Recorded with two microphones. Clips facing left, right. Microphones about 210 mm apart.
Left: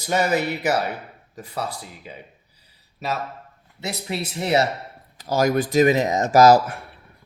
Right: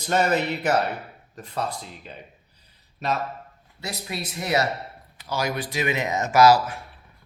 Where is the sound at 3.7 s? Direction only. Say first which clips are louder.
Left 4 dB; 25° left (ahead or behind).